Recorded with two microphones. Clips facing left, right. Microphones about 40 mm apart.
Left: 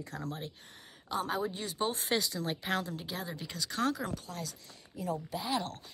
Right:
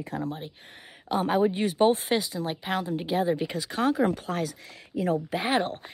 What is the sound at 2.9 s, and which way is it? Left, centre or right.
Speech, right.